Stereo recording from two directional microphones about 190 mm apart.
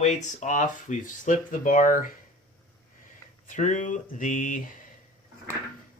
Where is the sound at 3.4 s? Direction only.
40° left (ahead or behind).